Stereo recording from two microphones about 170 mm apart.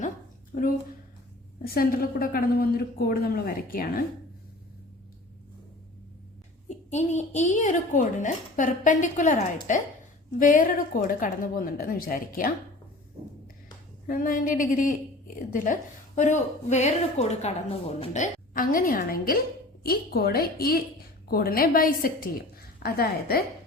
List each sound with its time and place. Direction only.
1.6 s a woman's voice: 60° left (ahead or behind)
6.7 s a woman's voice: 40° left (ahead or behind)
14.1 s a woman's voice: 55° left (ahead or behind)